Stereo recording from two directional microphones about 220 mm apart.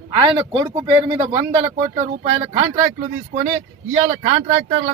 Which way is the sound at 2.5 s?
20° right (ahead or behind).